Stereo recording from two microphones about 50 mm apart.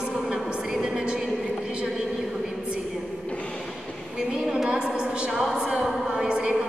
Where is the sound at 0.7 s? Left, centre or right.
Centre.